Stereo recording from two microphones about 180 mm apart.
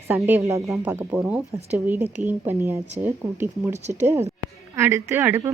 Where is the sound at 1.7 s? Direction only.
10° right (ahead or behind).